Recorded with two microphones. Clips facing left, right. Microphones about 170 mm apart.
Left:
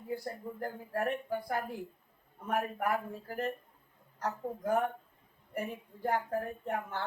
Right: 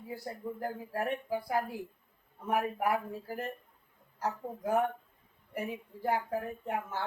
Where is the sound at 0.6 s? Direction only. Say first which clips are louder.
Left 1 dB; 5° right (ahead or behind).